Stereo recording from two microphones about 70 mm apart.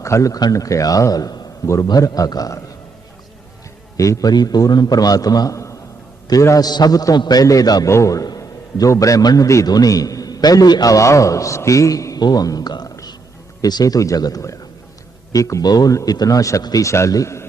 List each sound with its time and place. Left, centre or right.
0.0 s a man's voice: left
1.6 s a man's voice: left
1.9 s a man's voice: left
3.9 s a man's voice: left
4.3 s a man's voice: left
6.6 s a man's voice: left
7.9 s a man's voice: left
9.6 s a man's voice: left
10.9 s a man's voice: left
12.2 s a man's voice: left
15.6 s a man's voice: left
16.8 s a man's voice: left